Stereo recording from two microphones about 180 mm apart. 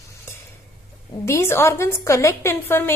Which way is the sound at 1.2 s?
15° left (ahead or behind).